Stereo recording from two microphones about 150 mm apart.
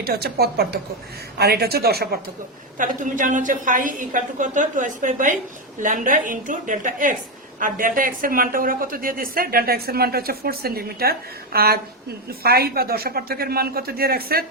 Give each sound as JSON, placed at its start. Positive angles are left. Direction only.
{"t": 0.0, "sound": "a woman's voice", "side_deg": -90}
{"t": 2.7, "sound": "a woman's voice", "side_deg": -60}